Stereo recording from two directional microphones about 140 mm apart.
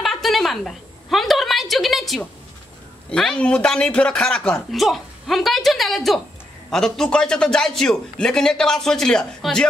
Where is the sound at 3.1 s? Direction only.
5° left (ahead or behind).